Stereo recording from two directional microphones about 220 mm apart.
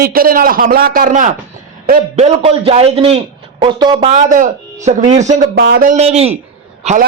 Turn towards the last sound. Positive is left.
turn(degrees=-30)  # may be behind; listen again after turning